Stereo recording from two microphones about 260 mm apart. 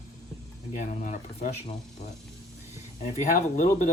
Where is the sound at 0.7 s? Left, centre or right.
Left.